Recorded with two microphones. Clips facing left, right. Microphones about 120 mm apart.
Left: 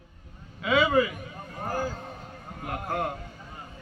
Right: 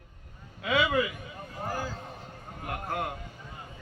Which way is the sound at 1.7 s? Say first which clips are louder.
Left 4 dB; 50° left (ahead or behind).